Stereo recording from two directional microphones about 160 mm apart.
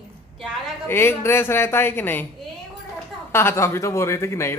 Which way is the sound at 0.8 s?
15° left (ahead or behind).